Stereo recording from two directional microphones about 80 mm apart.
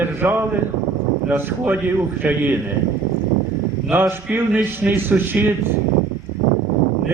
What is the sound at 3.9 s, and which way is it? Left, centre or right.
A man's voice, right.